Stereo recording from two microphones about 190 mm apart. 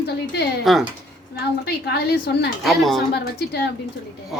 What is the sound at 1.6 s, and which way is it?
Speech, 60° left (ahead or behind).